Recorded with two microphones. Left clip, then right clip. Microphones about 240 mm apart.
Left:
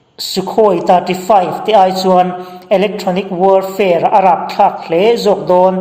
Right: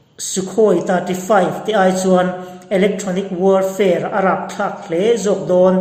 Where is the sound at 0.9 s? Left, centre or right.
Left.